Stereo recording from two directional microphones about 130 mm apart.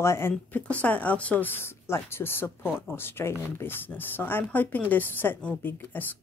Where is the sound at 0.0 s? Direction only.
20° left (ahead or behind).